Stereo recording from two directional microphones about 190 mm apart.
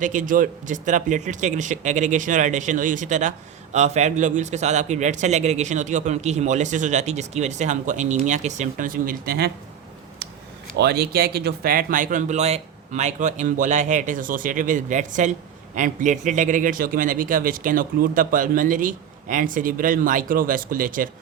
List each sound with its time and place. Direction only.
0.0 s speech: 40° right (ahead or behind)
10.8 s speech: 60° right (ahead or behind)